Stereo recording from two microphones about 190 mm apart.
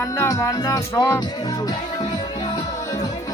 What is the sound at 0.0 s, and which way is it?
Music, 15° left (ahead or behind).